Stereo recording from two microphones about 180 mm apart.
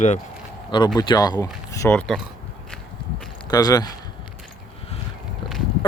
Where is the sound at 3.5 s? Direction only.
20° left (ahead or behind).